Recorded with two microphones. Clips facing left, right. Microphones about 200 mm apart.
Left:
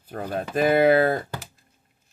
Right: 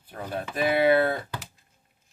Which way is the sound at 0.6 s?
45° left (ahead or behind).